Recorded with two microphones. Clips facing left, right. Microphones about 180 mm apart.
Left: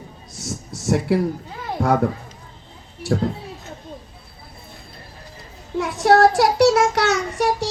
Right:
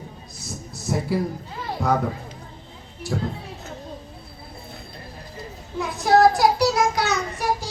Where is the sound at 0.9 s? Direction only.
70° left (ahead or behind).